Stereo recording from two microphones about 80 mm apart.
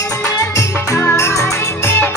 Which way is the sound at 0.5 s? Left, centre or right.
Left.